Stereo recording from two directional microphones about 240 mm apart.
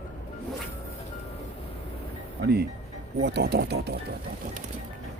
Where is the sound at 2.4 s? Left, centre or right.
Right.